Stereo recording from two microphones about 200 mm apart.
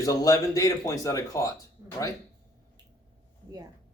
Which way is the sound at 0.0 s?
15° left (ahead or behind).